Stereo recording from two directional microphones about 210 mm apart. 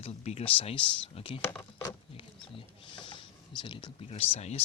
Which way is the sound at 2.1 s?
25° left (ahead or behind).